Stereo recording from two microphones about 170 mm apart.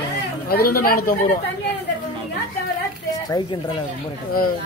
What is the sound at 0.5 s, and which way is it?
Speech, 60° left (ahead or behind).